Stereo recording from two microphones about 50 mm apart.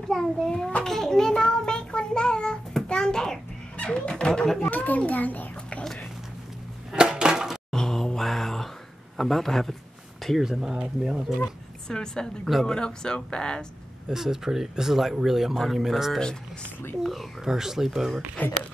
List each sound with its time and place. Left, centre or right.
0.1 s speech: centre
0.8 s child singing: centre
2.7 s a sound: centre
4.6 s a child's voice: left
6.9 s a sound: centre
7.7 s mantra: centre
9.1 s a man's voice: centre
11.9 s speech: centre
14.0 s a man's voice: centre
18.4 s a child's voice: left